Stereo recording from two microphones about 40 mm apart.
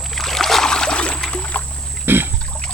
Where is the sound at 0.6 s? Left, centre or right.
Centre.